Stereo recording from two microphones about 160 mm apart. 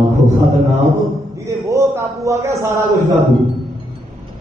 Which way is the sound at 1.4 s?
20° right (ahead or behind).